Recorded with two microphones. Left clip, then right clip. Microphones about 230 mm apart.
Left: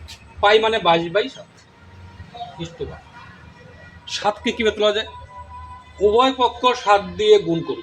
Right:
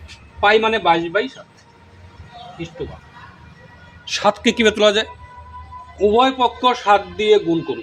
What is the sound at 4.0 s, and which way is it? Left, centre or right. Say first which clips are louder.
Speech: right 5 dB; right.